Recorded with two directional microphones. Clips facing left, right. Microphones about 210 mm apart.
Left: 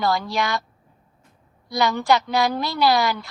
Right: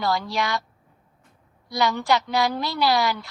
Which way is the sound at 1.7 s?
50° left (ahead or behind).